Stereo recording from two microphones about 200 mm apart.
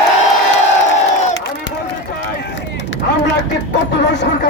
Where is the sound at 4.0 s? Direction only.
60° left (ahead or behind).